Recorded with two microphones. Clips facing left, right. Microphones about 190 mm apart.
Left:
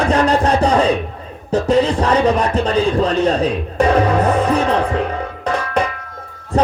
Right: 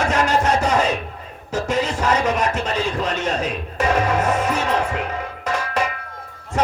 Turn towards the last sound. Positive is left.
turn(degrees=35)  # may be behind; listen again after turning